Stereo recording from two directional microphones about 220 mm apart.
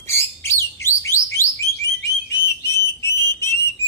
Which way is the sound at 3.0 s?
10° left (ahead or behind).